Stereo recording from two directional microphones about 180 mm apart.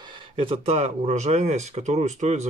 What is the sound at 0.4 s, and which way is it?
Speech, 30° right (ahead or behind).